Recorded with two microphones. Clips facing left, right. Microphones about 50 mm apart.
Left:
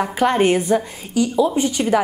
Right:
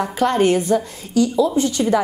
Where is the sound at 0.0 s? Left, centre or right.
Centre.